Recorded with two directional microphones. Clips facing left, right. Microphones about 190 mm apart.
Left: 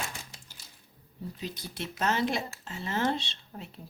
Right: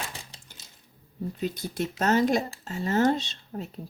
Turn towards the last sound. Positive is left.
turn(degrees=-40)  # may be behind; listen again after turning